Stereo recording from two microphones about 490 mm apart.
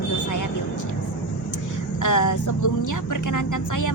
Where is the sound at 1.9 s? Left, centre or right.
Left.